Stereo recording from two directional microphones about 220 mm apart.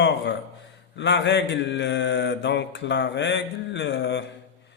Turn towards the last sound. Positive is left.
turn(degrees=55)  # may be behind; listen again after turning